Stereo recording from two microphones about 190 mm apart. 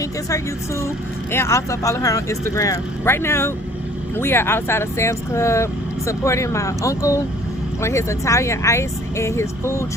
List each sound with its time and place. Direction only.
0.0 s speech: 15° left (ahead or behind)